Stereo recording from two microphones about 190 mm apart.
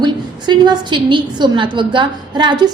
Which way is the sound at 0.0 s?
25° right (ahead or behind).